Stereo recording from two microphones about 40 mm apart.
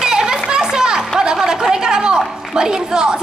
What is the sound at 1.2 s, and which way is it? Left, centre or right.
A woman's voice, centre.